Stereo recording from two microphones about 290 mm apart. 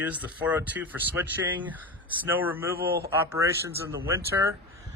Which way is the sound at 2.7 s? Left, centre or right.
Right.